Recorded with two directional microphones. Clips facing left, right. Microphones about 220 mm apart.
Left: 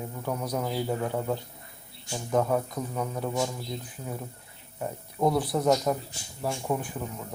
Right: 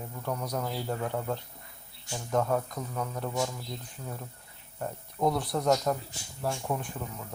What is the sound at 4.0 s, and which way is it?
Speech, 15° left (ahead or behind).